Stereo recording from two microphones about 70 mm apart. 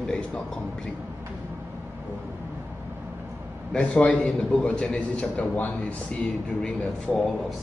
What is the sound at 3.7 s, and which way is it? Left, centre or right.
A man's voice, centre.